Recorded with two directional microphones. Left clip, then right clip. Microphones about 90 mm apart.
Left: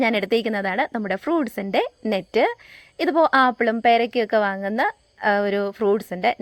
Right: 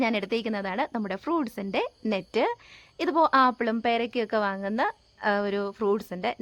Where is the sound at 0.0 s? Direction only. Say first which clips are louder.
Left 7 dB; 40° left (ahead or behind).